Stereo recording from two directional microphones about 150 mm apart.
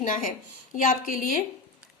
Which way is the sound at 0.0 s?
60° left (ahead or behind).